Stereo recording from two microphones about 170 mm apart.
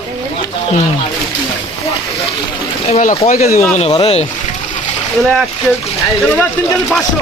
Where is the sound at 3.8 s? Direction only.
35° left (ahead or behind).